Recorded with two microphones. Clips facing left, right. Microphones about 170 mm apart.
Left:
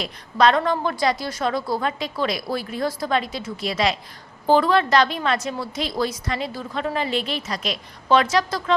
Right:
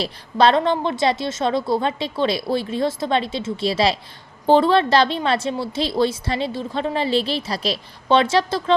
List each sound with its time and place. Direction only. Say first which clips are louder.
0.0 s a woman's voice: right 2 dB; 30° right (ahead or behind)